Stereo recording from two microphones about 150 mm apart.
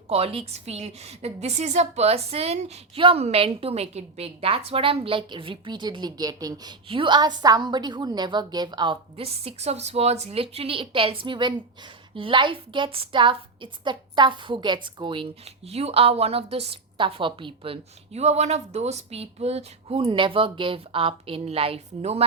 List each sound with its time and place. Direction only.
0.1 s a woman's voice: 40° right (ahead or behind)